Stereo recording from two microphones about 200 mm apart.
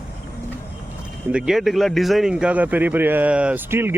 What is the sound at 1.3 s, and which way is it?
Speech, 5° right (ahead or behind).